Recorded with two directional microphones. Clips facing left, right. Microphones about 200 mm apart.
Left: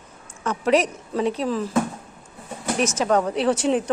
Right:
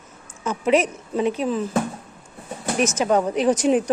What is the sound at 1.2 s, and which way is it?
Speech, 30° left (ahead or behind).